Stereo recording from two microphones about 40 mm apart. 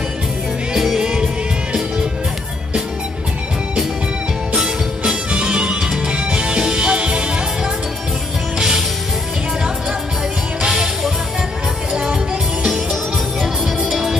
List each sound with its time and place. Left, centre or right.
0.7 s music: centre
4.6 s music: centre
11.9 s music: right
13.4 s music: centre